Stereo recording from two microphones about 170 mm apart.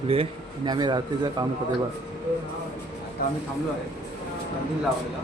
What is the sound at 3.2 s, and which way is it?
Speech, 60° left (ahead or behind).